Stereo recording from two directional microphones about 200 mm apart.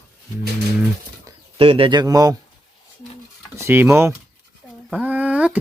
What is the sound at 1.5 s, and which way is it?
Speech, 25° right (ahead or behind).